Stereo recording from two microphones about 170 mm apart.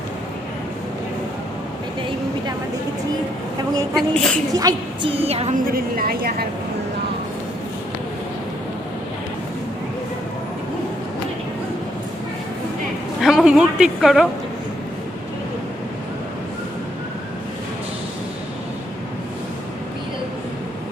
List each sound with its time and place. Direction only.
3.9 s a woman's voice: 5° left (ahead or behind)
4.5 s a woman's voice: 20° right (ahead or behind)
5.1 s a woman's voice: 35° right (ahead or behind)
5.7 s a woman's voice: 60° right (ahead or behind)
13.2 s a sound: 5° right (ahead or behind)